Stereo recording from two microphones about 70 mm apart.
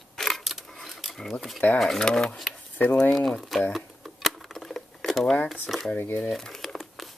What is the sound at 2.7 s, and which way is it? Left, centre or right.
Speech, left.